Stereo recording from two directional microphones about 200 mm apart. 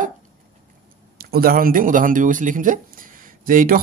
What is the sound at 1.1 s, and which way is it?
Speech, 50° right (ahead or behind).